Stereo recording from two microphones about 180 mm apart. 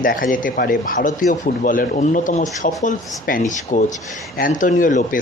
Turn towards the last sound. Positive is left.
turn(degrees=45)  # may be behind; listen again after turning